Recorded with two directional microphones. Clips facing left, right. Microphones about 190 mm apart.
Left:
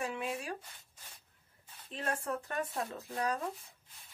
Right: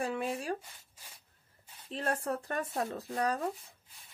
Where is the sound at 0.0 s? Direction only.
35° right (ahead or behind).